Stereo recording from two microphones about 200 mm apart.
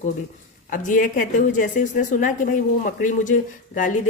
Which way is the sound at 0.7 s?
40° left (ahead or behind).